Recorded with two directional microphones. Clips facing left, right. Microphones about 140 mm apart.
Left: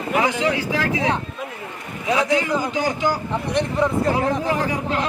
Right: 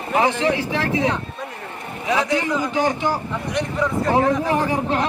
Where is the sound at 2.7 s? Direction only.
25° right (ahead or behind).